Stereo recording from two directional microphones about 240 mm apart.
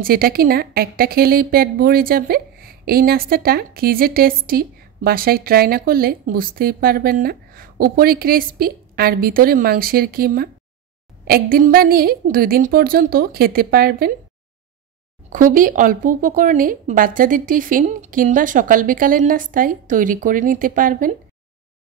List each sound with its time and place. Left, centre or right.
0.0 s a woman's voice: right
15.2 s a woman's voice: right